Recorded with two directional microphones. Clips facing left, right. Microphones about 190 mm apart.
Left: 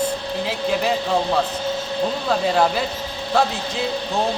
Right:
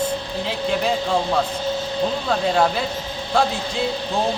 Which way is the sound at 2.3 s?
5° left (ahead or behind).